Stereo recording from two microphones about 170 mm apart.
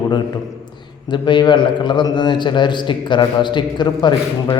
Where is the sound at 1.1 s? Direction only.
25° left (ahead or behind).